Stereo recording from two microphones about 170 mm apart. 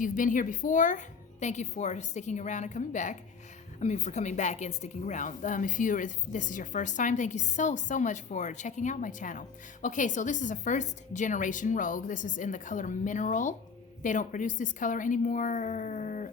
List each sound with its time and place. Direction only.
0.0 s a woman's voice: 50° left (ahead or behind)